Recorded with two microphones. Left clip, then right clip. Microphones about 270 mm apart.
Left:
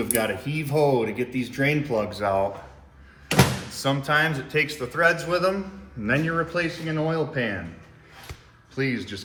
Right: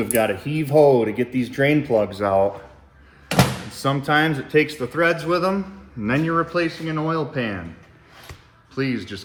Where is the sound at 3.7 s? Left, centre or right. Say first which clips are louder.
Right 3 dB; right; by 7.6 s centre.